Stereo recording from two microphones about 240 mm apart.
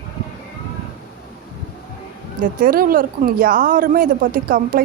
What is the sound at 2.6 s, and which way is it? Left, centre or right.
Speech, right.